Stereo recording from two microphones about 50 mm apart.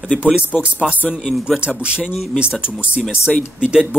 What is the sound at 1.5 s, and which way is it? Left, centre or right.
Speech, right.